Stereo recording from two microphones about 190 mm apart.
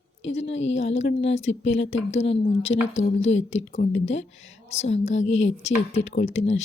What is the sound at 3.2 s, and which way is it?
Speech, 85° left.